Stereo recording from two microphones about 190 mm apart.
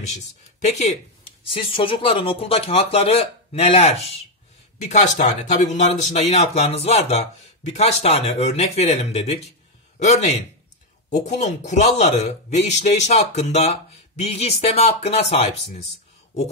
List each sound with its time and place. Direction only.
0.1 s a man's voice: 35° left (ahead or behind)